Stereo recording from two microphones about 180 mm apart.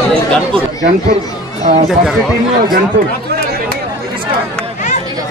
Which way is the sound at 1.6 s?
40° right (ahead or behind).